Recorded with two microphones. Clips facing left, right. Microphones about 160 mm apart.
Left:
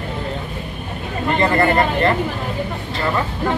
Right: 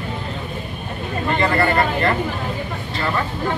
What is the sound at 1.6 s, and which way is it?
Speech, 20° left (ahead or behind).